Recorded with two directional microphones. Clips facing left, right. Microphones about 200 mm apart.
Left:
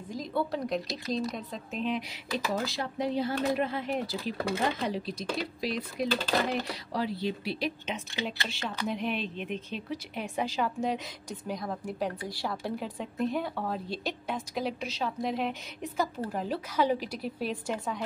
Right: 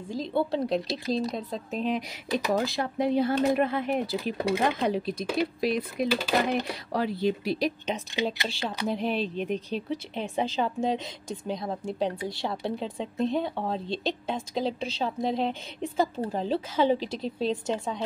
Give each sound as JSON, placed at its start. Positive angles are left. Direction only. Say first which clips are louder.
{"t": 0.1, "sound": "speech", "louder": "right 4 dB", "side_deg": -25}
{"t": 2.5, "sound": "speech", "louder": "right 5 dB", "side_deg": -55}
{"t": 4.4, "sound": "speech", "louder": "right 4 dB", "side_deg": -15}
{"t": 4.8, "sound": "speech", "louder": "right 5 dB", "side_deg": -55}
{"t": 6.0, "sound": "speech", "louder": "right 2 dB", "side_deg": -10}
{"t": 6.9, "sound": "speech", "louder": "right 5 dB", "side_deg": -50}